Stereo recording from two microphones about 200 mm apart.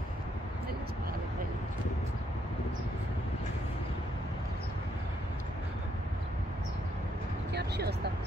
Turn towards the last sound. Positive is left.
turn(degrees=-55)  # may be behind; listen again after turning